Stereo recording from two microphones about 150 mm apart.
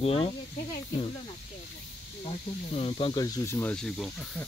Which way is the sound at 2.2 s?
40° left (ahead or behind).